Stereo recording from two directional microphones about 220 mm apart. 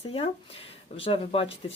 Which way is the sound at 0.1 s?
25° left (ahead or behind).